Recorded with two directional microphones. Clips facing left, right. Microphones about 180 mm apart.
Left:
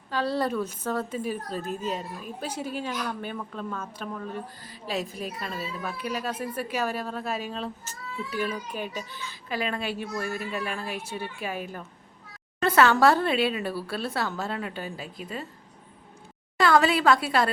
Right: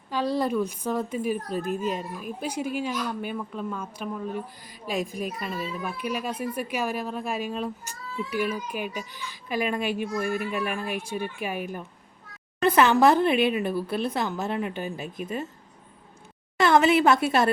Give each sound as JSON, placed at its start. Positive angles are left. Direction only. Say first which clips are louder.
{"t": 0.1, "sound": "speech", "louder": "right 2 dB", "side_deg": -10}
{"t": 16.6, "sound": "a woman's voice", "louder": "right 2 dB", "side_deg": -20}